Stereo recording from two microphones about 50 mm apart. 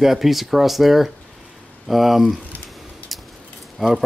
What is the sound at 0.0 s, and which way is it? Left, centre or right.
Speech, centre.